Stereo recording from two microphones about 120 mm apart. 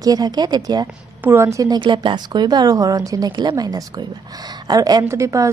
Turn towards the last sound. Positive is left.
turn(degrees=-25)  # may be behind; listen again after turning